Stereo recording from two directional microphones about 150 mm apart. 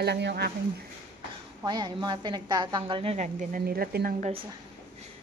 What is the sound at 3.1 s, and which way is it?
Speech, 55° right (ahead or behind).